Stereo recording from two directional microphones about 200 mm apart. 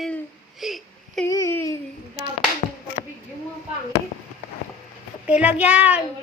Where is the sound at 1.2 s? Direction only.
15° left (ahead or behind).